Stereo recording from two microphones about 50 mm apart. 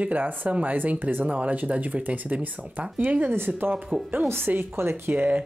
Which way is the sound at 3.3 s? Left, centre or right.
Right.